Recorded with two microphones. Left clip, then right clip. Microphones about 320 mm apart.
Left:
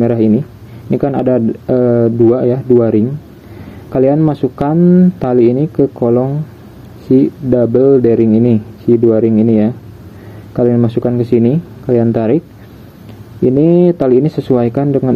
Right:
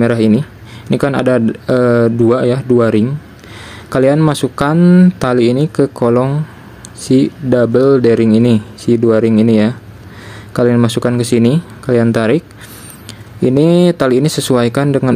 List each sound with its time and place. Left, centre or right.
0.0 s speech: right